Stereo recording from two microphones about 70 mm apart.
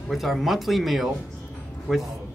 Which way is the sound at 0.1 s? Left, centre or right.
Centre.